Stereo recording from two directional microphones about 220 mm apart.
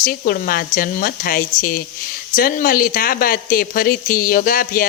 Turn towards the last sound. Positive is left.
turn(degrees=40)  # may be behind; listen again after turning